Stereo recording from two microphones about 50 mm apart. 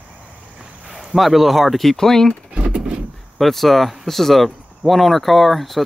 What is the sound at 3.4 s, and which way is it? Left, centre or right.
Speech, centre.